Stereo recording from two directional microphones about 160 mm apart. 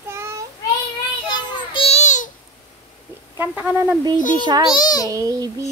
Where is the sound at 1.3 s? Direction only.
30° left (ahead or behind); by 2.3 s 50° left (ahead or behind).